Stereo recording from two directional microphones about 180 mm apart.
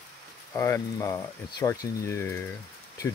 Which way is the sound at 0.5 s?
15° left (ahead or behind).